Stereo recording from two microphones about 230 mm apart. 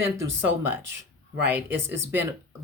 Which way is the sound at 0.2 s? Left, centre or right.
Centre.